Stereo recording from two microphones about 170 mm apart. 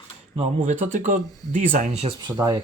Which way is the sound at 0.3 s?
45° right (ahead or behind).